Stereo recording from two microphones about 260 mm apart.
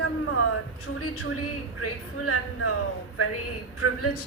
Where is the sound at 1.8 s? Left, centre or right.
Left.